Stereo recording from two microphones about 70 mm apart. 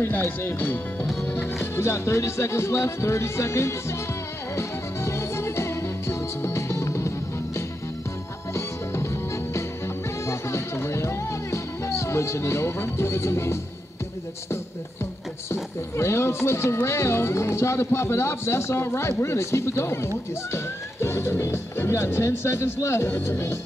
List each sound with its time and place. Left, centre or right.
0.0 s speech: left
4.6 s music: left
15.5 s speech: left